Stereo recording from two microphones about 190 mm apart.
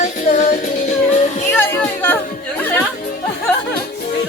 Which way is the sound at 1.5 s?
10° left (ahead or behind).